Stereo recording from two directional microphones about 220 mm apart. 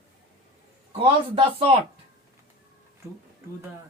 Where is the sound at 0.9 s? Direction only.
25° right (ahead or behind).